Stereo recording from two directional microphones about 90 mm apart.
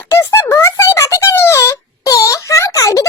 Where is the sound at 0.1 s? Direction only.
30° left (ahead or behind).